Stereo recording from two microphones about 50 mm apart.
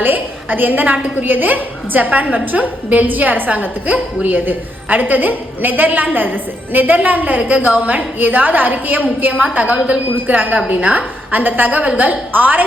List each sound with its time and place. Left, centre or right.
0.0 s a woman's voice: right